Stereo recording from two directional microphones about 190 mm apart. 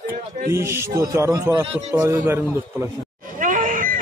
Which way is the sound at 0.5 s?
15° right (ahead or behind).